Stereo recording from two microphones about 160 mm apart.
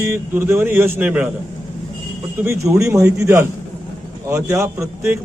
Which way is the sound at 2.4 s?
15° right (ahead or behind).